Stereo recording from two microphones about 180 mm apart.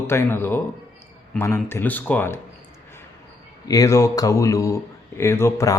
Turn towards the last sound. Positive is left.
turn(degrees=15)  # may be behind; listen again after turning